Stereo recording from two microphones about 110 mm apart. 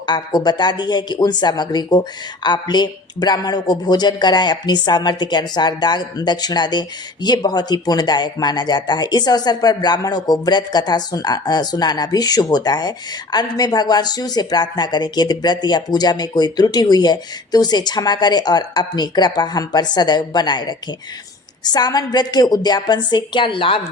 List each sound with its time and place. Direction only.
0.0 s speech: 40° left (ahead or behind)